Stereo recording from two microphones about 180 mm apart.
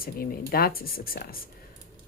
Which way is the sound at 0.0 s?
55° left (ahead or behind).